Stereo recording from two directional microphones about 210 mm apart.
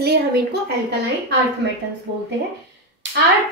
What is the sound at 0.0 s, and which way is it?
Speech, 50° right (ahead or behind).